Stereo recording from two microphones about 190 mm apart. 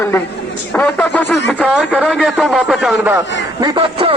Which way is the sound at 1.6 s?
5° right (ahead or behind).